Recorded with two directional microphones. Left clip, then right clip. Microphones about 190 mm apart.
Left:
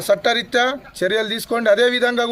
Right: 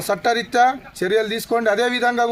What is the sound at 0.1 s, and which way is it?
A man's voice, 25° left (ahead or behind).